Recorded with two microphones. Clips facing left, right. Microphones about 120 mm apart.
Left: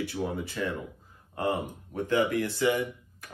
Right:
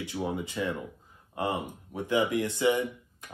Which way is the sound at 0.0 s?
15° right (ahead or behind).